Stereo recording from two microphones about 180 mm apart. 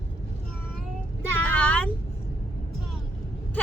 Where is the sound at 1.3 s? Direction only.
10° left (ahead or behind).